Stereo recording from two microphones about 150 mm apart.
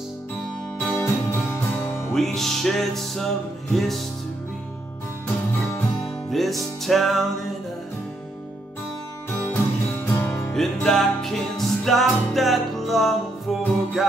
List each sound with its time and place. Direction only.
0.7 s music: 10° left (ahead or behind)
2.1 s music: centre (ahead or behind)
6.3 s music: centre (ahead or behind)
9.5 s music: 15° left (ahead or behind)
10.5 s music: 5° left (ahead or behind)